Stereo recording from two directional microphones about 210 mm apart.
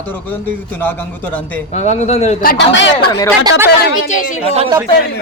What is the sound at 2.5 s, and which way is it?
Speech, 60° left (ahead or behind).